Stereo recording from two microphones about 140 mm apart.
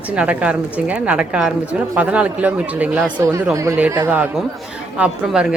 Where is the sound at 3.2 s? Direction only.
20° right (ahead or behind).